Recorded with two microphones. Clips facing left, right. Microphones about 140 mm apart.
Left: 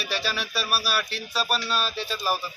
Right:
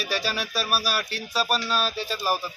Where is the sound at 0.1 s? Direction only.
40° right (ahead or behind).